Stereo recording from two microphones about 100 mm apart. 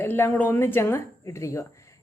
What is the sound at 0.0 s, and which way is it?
Speech, 20° left (ahead or behind).